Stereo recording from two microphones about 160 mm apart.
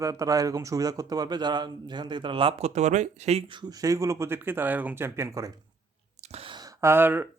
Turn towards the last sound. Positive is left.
turn(degrees=-15)  # may be behind; listen again after turning